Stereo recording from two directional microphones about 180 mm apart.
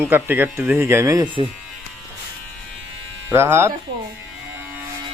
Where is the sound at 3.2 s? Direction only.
15° right (ahead or behind).